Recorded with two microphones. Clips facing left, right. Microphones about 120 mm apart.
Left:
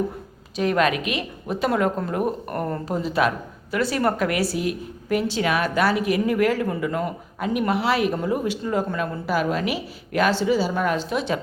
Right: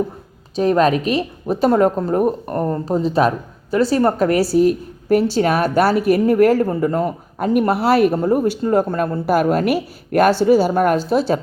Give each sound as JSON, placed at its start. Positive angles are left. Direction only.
{"t": 0.5, "sound": "a woman's voice", "side_deg": -35}